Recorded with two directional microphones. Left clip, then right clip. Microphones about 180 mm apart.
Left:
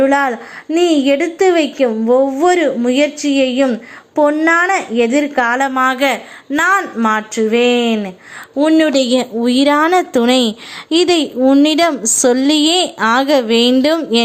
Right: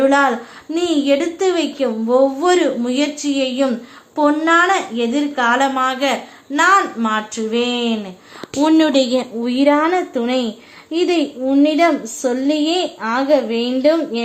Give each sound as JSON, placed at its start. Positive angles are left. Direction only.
{"t": 0.0, "sound": "a woman's voice", "side_deg": 30}
{"t": 8.6, "sound": "speech", "side_deg": 5}
{"t": 8.9, "sound": "a woman's voice", "side_deg": 20}